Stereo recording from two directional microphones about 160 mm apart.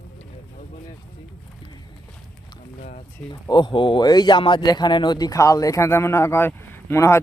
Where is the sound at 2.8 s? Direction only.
45° left (ahead or behind).